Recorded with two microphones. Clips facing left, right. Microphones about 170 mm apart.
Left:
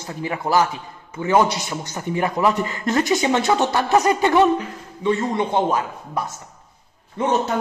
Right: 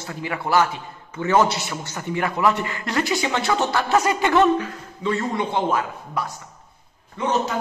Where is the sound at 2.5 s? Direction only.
40° left (ahead or behind).